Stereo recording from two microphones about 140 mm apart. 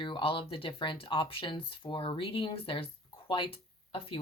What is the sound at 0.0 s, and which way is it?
Speech, 40° left (ahead or behind).